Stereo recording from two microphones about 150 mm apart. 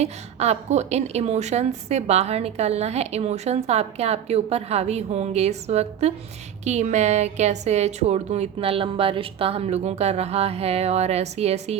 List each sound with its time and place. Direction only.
0.0 s a woman's voice: 45° right (ahead or behind)